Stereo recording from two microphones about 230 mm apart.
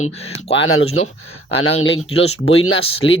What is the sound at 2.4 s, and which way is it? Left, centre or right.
Speech, left.